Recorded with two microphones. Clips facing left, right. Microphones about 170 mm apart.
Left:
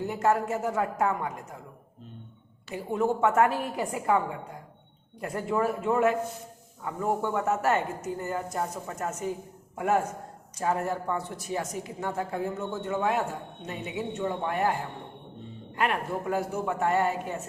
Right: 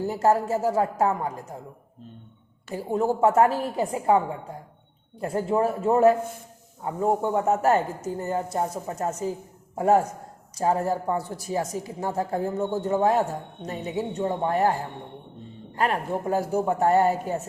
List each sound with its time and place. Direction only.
0.0 s speech: 35° right (ahead or behind)
2.6 s a man's voice: 35° right (ahead or behind)